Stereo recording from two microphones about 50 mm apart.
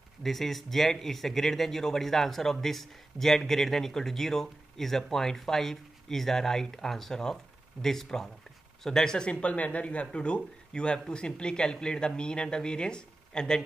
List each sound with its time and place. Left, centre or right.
0.2 s speech: centre